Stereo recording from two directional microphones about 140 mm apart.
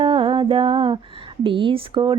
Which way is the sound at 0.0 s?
40° right (ahead or behind).